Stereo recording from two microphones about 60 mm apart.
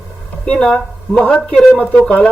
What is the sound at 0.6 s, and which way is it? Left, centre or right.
Speech, centre.